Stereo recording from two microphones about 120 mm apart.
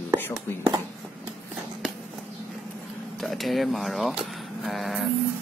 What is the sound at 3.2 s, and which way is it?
Speech, centre (ahead or behind).